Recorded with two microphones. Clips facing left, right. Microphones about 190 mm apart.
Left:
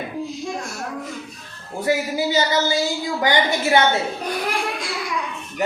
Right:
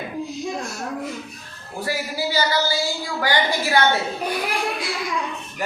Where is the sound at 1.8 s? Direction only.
20° left (ahead or behind).